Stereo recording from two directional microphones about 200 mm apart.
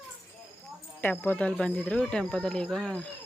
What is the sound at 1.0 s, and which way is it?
Speech, 10° left (ahead or behind).